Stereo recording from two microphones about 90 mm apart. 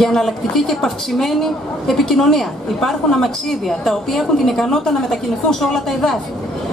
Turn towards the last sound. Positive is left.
turn(degrees=5)  # may be behind; listen again after turning